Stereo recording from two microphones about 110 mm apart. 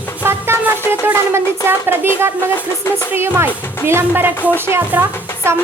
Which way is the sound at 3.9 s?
20° right (ahead or behind).